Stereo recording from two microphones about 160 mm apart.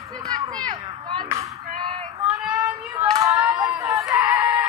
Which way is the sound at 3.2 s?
20° right (ahead or behind).